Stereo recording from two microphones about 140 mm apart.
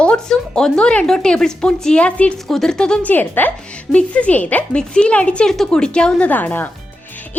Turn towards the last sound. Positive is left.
turn(degrees=15)  # may be behind; listen again after turning